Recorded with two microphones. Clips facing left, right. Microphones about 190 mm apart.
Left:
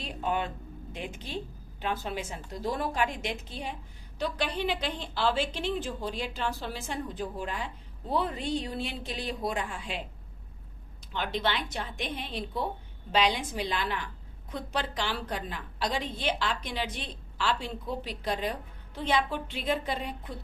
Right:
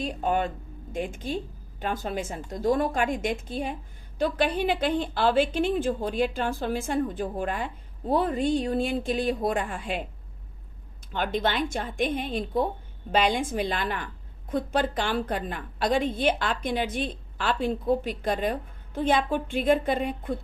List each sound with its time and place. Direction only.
0.0 s a woman's voice: 45° right (ahead or behind)
11.1 s a woman's voice: 50° right (ahead or behind)